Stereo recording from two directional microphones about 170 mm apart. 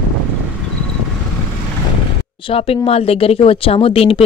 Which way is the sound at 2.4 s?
35° left (ahead or behind).